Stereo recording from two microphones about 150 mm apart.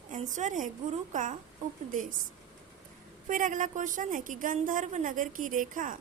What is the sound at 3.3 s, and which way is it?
A woman's voice, 60° right (ahead or behind).